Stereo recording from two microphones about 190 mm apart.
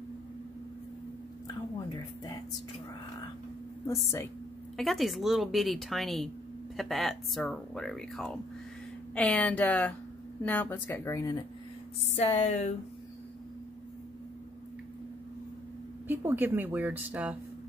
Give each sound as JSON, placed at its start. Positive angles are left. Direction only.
{"t": 3.8, "sound": "speech", "side_deg": 15}
{"t": 4.7, "sound": "speech", "side_deg": 0}
{"t": 12.2, "sound": "speech", "side_deg": 35}
{"t": 16.1, "sound": "speech", "side_deg": -10}